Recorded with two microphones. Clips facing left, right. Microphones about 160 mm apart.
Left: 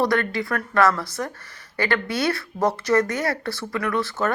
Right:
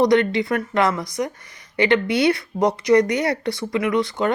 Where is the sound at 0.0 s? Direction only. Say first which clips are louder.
Right 5 dB; 20° right (ahead or behind).